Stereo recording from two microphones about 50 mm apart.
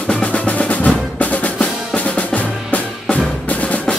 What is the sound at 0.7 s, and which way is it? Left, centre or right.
Music, left.